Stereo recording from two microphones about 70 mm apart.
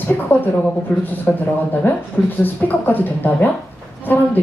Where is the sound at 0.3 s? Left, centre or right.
Left.